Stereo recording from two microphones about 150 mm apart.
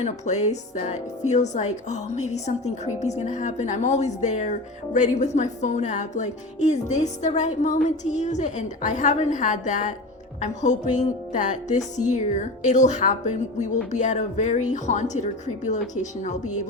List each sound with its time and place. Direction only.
0.0 s a woman's voice: 50° left (ahead or behind)